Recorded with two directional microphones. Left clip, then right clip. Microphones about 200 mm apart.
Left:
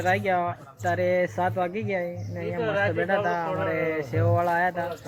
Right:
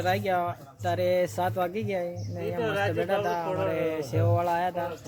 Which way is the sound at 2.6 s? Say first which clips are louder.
Left 3 dB; 55° right (ahead or behind).